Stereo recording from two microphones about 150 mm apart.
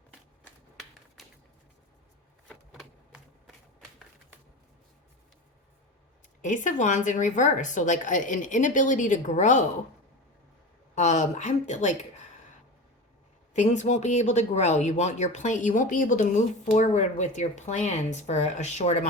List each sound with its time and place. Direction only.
1.2 s a sound: centre (ahead or behind)
6.4 s speech: 60° left (ahead or behind)
10.9 s speech: 50° left (ahead or behind)
13.5 s speech: 55° left (ahead or behind)